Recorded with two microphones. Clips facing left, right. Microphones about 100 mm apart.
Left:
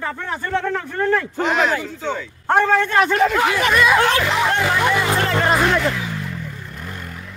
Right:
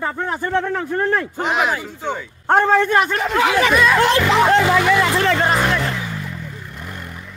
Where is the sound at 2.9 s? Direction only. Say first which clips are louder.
Even; 5° right (ahead or behind).